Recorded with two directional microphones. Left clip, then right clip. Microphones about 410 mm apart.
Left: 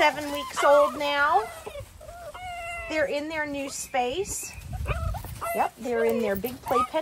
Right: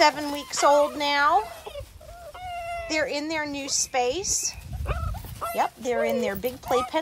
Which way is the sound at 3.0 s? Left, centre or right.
Right.